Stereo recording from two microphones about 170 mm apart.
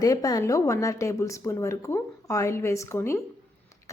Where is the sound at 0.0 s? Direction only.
20° left (ahead or behind).